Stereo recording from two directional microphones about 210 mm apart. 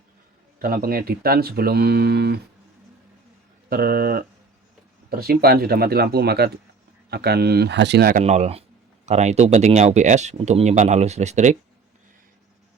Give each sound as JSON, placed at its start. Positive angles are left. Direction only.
{"t": 0.6, "sound": "speech", "side_deg": -45}
{"t": 3.7, "sound": "speech", "side_deg": -45}
{"t": 8.2, "sound": "speech", "side_deg": -30}